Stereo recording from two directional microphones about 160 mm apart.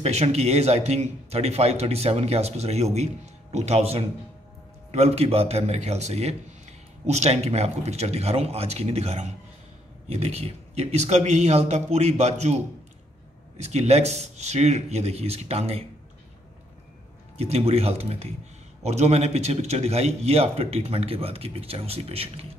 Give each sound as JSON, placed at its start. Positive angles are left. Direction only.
{"t": 0.0, "sound": "speech", "side_deg": -40}
{"t": 13.6, "sound": "speech", "side_deg": -45}
{"t": 17.4, "sound": "speech", "side_deg": -40}